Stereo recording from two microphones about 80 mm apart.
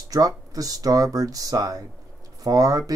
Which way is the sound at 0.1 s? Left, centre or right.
Right.